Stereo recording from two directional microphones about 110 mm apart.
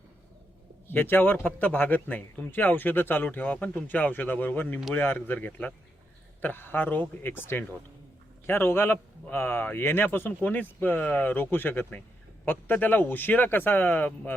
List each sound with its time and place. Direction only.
0.9 s speech: 20° left (ahead or behind)